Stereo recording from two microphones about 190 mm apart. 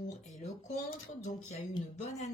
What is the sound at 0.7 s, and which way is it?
Speech, 40° left (ahead or behind).